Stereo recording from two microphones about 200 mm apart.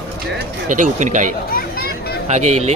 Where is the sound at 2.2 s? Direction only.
35° right (ahead or behind).